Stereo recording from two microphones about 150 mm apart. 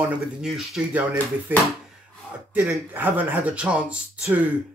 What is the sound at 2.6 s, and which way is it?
A man's voice, 15° right (ahead or behind).